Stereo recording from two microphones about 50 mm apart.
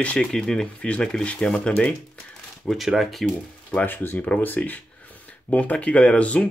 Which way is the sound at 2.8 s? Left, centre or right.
Centre.